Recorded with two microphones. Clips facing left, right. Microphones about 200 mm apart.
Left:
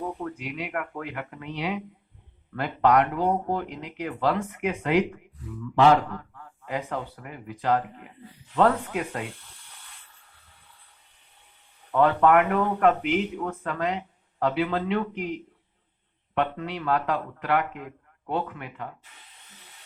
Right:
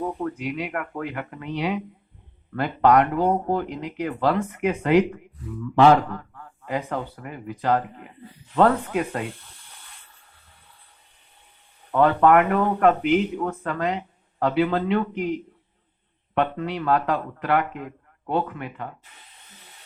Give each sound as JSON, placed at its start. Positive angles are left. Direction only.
{"t": 0.2, "sound": "a man's voice", "side_deg": -45}
{"t": 11.9, "sound": "speech", "side_deg": -45}
{"t": 16.3, "sound": "speech", "side_deg": -45}